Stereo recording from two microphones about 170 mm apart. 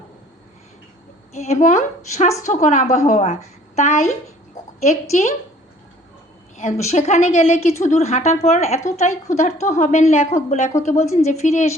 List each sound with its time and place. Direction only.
1.3 s a woman's voice: 40° left (ahead or behind)
6.6 s a woman's voice: 40° left (ahead or behind)